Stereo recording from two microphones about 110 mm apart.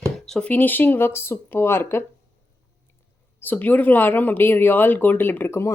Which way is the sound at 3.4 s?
15° left (ahead or behind).